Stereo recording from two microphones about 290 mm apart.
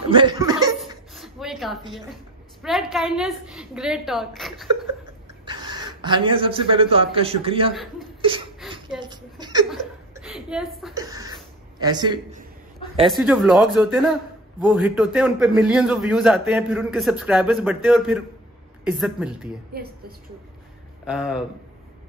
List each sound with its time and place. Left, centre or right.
0.1 s speech: centre
1.1 s a sound: centre
2.6 s a man's voice: centre
5.4 s a man's voice: centre
7.7 s a man's voice: centre
8.6 s a sound: centre
9.0 s a sound: centre
9.7 s chuckle: centre
11.0 s a sound: centre
11.8 s a man's voice: centre
13.0 s a man's voice: centre
19.7 s a woman's voice: right
21.0 s speech: centre